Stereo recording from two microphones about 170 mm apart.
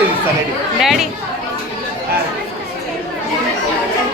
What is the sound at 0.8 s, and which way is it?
Speech, centre (ahead or behind).